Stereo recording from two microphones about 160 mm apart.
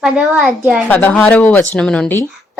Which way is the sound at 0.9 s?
10° left (ahead or behind).